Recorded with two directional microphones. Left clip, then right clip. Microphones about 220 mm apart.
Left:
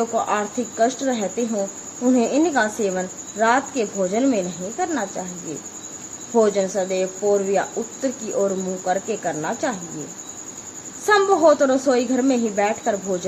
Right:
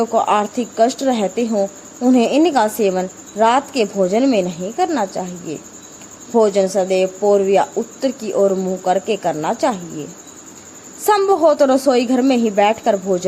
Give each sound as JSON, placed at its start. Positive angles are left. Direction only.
{"t": 0.1, "sound": "speech", "side_deg": -25}
{"t": 6.3, "sound": "speech", "side_deg": -25}
{"t": 11.0, "sound": "speech", "side_deg": -25}